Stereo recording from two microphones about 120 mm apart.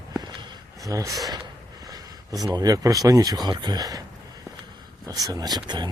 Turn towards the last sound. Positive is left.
turn(degrees=-40)  # may be behind; listen again after turning